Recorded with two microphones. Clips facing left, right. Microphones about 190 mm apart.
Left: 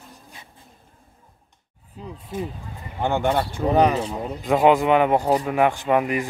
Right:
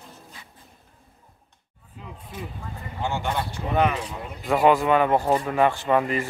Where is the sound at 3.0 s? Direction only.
55° left (ahead or behind).